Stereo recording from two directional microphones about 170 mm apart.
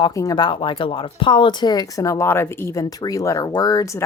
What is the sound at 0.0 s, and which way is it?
Speech, 20° left (ahead or behind).